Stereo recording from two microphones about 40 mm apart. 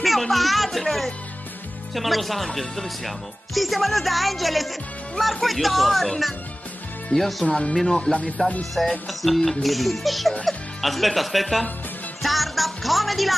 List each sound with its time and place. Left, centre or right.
0.0 s speech: centre
7.4 s speech: left
7.7 s music: centre
8.0 s speech: left
8.8 s music: centre
9.2 s speech: centre